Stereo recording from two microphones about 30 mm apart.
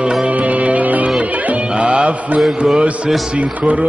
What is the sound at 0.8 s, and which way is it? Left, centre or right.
Music, right.